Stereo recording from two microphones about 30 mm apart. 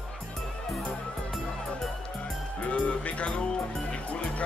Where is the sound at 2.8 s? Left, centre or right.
Left.